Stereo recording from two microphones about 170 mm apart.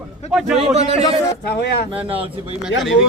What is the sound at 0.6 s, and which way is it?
Speech, 35° right (ahead or behind).